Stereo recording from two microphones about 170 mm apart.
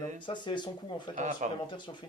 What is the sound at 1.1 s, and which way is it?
Speech, 45° right (ahead or behind).